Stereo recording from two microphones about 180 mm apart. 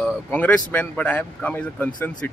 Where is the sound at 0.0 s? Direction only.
10° left (ahead or behind).